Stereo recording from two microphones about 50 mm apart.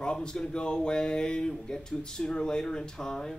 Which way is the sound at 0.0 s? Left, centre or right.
Centre.